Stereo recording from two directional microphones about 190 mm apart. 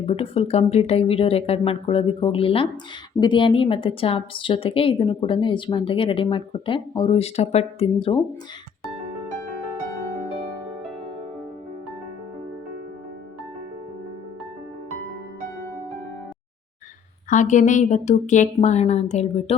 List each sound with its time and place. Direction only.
0.0 s speech: 30° left (ahead or behind)
17.2 s speech: 40° left (ahead or behind)